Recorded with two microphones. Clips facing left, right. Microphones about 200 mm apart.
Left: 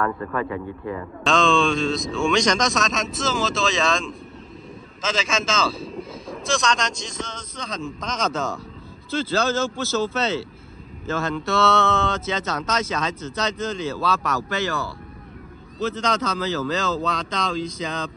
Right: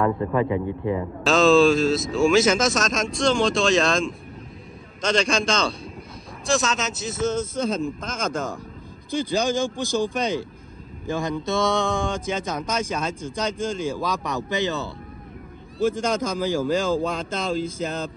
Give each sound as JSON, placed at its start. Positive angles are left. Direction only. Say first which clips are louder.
{"t": 0.0, "sound": "speech", "louder": "right 4 dB", "side_deg": -15}
{"t": 1.2, "sound": "speech", "louder": "right 4 dB", "side_deg": -5}
{"t": 17.6, "sound": "speech", "louder": "right 1 dB", "side_deg": -50}